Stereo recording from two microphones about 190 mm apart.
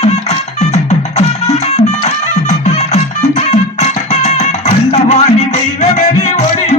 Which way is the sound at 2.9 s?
35° left (ahead or behind).